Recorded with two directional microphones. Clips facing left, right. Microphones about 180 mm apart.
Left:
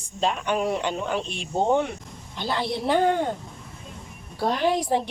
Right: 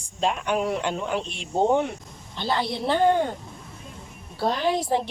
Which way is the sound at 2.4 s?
10° left (ahead or behind).